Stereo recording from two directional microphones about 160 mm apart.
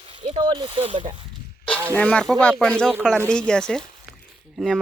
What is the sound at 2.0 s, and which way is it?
Speech, 5° left (ahead or behind).